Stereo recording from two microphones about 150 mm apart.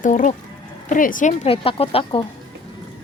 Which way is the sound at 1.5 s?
40° left (ahead or behind).